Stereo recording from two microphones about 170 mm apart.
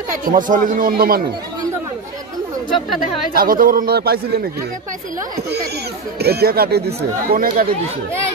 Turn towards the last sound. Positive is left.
turn(degrees=-60)  # may be behind; listen again after turning